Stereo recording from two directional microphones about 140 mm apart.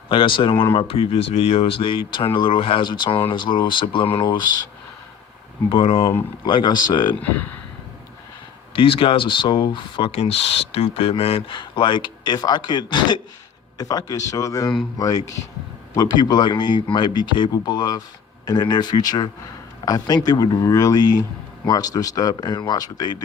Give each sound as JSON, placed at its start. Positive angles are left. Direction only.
{"t": 0.1, "sound": "speech", "side_deg": 35}
{"t": 0.5, "sound": "speech", "side_deg": 15}
{"t": 0.8, "sound": "speech", "side_deg": 40}
{"t": 5.6, "sound": "speech", "side_deg": 40}
{"t": 8.7, "sound": "speech", "side_deg": 40}